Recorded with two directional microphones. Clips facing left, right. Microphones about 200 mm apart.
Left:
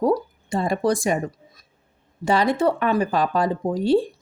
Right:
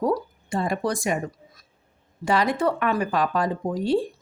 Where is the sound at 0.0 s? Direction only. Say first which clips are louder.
Left 3 dB; 25° left (ahead or behind).